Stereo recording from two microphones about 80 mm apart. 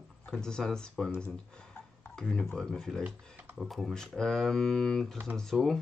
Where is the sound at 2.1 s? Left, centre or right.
Centre.